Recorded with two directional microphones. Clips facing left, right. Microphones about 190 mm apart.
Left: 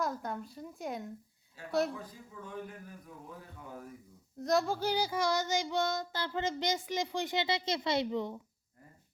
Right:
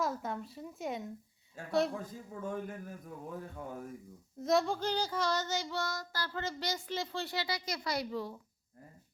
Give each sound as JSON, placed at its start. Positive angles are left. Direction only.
{"t": 0.0, "sound": "a woman's voice", "side_deg": 0}
{"t": 1.6, "sound": "speech", "side_deg": -50}
{"t": 4.4, "sound": "child singing", "side_deg": 0}